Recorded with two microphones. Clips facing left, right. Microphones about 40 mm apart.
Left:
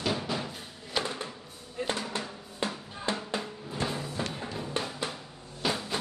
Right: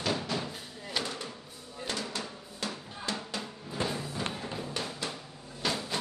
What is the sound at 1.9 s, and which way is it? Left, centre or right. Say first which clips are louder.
Music: left 1 dB; left.